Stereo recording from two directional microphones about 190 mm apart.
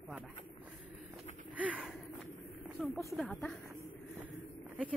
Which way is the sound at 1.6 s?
5° right (ahead or behind).